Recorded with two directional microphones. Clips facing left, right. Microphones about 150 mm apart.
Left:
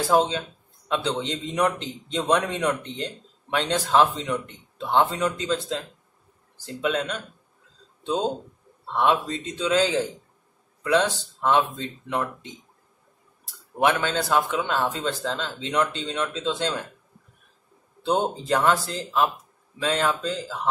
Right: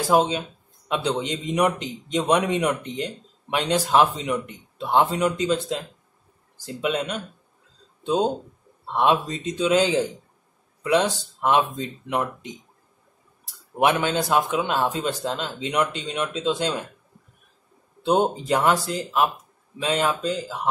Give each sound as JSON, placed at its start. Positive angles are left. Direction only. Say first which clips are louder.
{"t": 0.3, "sound": "a man's voice", "louder": "right 2 dB", "side_deg": -15}
{"t": 8.9, "sound": "a man's voice", "louder": "right 1 dB", "side_deg": -20}
{"t": 13.7, "sound": "a man's voice", "louder": "right 2 dB", "side_deg": -20}
{"t": 18.0, "sound": "a man's voice", "louder": "right 3 dB", "side_deg": -15}